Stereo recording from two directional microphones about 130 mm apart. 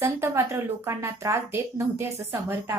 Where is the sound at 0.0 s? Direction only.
20° right (ahead or behind).